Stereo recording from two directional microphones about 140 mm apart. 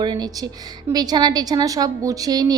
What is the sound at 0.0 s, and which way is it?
A woman's voice, 30° right (ahead or behind).